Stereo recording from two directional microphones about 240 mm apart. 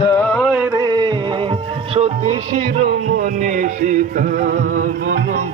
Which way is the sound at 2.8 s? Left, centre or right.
Right.